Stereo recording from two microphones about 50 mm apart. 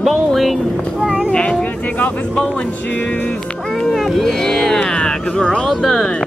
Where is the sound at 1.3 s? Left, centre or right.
Left.